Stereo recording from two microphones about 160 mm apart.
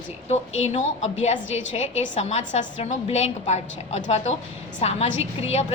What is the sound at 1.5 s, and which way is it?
A woman's voice, 40° left (ahead or behind).